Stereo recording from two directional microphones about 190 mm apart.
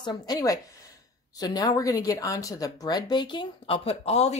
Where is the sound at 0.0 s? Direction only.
20° left (ahead or behind).